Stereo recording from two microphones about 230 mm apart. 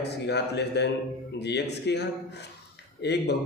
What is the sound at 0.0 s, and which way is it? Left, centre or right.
A man's voice, left.